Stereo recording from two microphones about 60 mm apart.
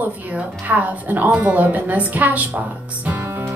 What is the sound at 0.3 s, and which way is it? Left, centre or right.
Speech, right.